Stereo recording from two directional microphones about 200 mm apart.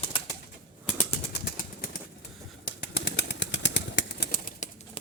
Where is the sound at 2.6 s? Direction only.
60° left (ahead or behind); by 4.7 s 45° left (ahead or behind).